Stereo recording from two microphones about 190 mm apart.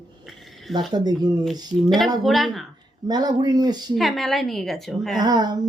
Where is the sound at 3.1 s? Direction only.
20° right (ahead or behind).